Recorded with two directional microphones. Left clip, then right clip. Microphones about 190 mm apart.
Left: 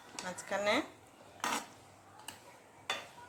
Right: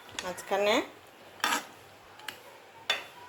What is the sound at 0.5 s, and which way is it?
Speech, 15° right (ahead or behind).